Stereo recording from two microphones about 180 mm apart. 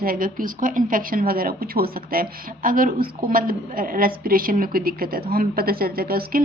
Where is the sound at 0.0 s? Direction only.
55° right (ahead or behind).